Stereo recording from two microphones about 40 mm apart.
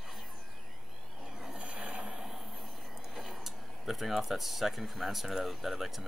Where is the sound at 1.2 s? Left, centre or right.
Centre.